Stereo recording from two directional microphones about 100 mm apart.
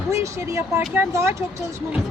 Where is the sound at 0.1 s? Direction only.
30° right (ahead or behind).